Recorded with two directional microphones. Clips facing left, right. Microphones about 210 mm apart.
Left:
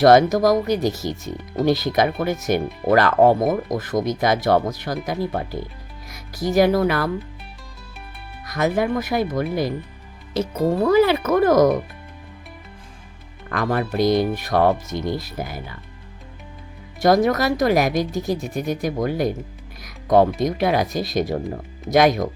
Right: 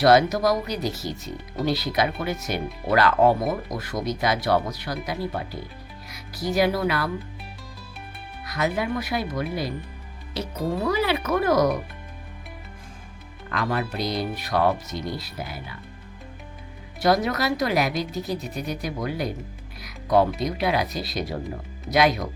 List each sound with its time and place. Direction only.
0.0 s speech: 45° left (ahead or behind)
8.4 s speech: 45° left (ahead or behind)
10.8 s speech: 45° left (ahead or behind)
13.5 s speech: 50° left (ahead or behind)
17.0 s speech: 45° left (ahead or behind)